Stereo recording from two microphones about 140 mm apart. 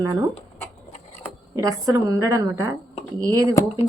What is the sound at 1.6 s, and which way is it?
Speech, 25° right (ahead or behind).